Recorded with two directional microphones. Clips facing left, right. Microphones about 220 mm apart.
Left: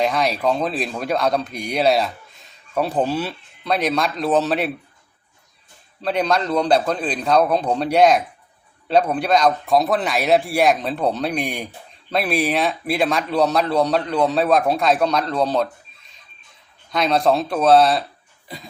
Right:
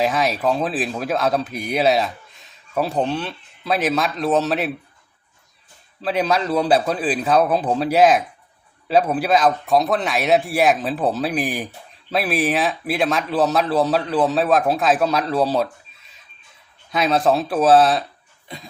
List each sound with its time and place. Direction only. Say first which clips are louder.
0.0 s speech: even; 5° right (ahead or behind)
6.0 s speech: even; 5° right (ahead or behind)
16.9 s speech: even; 5° right (ahead or behind)
18.4 s cough: even; centre (ahead or behind)